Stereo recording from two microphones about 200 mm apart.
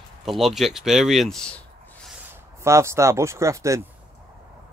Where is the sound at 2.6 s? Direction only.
15° right (ahead or behind).